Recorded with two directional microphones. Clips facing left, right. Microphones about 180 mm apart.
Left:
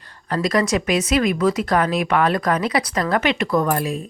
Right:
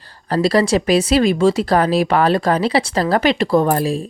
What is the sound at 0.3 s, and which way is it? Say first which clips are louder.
Speech: right 4 dB; 30° right (ahead or behind).